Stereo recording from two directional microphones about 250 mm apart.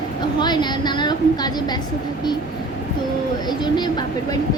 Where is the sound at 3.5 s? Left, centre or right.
Centre.